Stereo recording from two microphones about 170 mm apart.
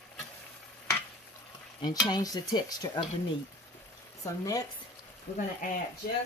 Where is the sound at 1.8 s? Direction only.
25° left (ahead or behind).